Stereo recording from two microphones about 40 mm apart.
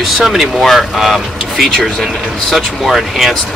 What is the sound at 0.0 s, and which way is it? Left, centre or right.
Speech, centre.